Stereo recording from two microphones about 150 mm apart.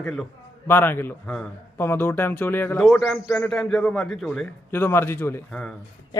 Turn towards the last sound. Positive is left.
turn(degrees=5)  # may be behind; listen again after turning